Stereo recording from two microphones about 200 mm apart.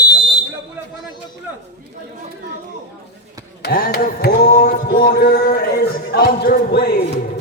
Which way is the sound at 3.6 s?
50° left (ahead or behind).